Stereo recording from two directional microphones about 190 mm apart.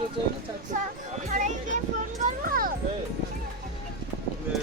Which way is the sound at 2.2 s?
50° right (ahead or behind).